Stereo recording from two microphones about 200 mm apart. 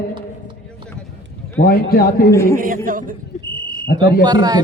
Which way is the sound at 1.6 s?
45° left (ahead or behind).